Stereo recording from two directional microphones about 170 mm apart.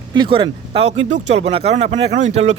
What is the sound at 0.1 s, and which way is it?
Speech, 30° right (ahead or behind).